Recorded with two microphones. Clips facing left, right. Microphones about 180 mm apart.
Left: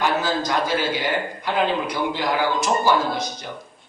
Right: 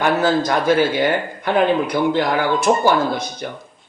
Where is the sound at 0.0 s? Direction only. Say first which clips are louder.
Right 5 dB; 55° right (ahead or behind).